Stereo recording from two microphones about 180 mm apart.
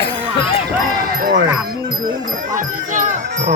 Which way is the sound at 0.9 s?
55° right (ahead or behind).